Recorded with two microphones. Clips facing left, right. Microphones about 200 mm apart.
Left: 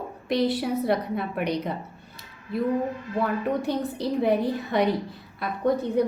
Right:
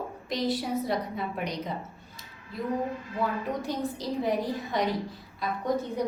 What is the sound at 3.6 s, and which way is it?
A woman's voice, 60° left (ahead or behind).